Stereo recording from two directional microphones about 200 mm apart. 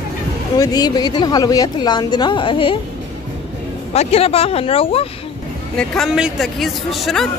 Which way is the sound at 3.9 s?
30° left (ahead or behind).